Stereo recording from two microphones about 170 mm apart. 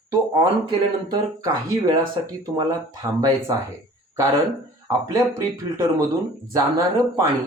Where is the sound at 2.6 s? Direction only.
20° right (ahead or behind).